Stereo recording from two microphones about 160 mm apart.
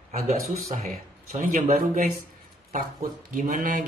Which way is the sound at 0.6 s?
45° right (ahead or behind).